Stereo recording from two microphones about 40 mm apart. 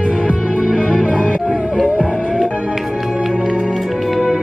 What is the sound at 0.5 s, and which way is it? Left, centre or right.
Music, right.